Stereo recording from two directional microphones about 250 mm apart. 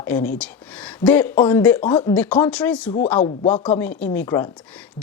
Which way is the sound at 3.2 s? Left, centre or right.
Left.